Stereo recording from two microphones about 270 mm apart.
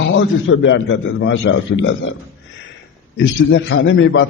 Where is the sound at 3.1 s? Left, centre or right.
Left.